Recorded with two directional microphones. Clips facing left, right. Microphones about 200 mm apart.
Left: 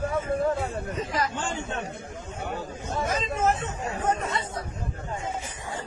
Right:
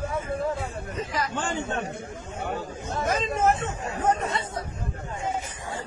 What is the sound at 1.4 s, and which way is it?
Speech, 60° right (ahead or behind).